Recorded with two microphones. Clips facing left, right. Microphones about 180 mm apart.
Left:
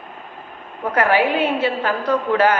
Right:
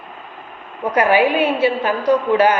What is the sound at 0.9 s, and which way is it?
A man's voice, 15° right (ahead or behind).